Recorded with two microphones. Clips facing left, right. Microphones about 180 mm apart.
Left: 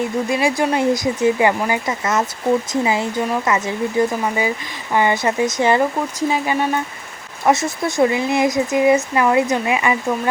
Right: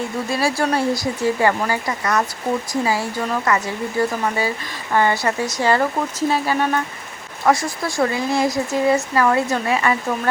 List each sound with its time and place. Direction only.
0.3 s speech: 15° left (ahead or behind)